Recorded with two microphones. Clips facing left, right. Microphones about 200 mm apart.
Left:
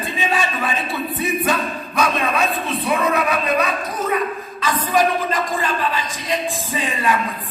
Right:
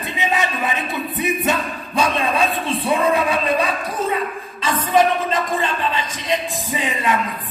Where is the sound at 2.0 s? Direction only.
30° right (ahead or behind).